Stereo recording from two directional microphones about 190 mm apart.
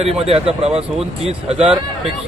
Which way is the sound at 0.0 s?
30° right (ahead or behind).